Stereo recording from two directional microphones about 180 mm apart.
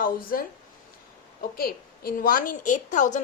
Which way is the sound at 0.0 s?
55° left (ahead or behind).